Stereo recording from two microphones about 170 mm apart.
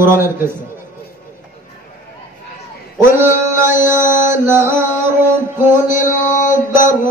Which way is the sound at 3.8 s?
15° right (ahead or behind).